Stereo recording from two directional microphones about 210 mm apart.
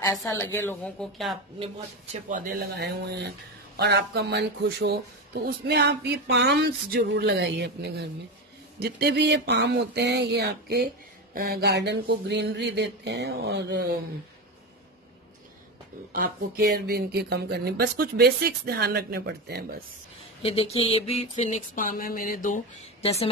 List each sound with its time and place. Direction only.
0.0 s a woman's voice: 15° left (ahead or behind)
2.2 s speech: 45° right (ahead or behind)
16.1 s speech: 45° right (ahead or behind)
20.4 s a sound: 25° left (ahead or behind); by 22.6 s 40° left (ahead or behind)